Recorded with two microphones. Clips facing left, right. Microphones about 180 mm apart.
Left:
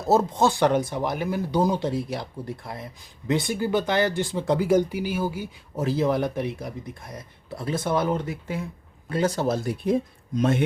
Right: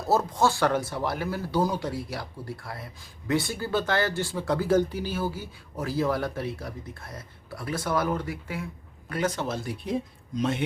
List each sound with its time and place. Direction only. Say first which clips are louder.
0.1 s speech: left 3 dB; 20° left (ahead or behind); by 10.6 s 50° left (ahead or behind)